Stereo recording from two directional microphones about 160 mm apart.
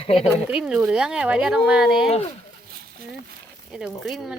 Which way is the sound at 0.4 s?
5° right (ahead or behind).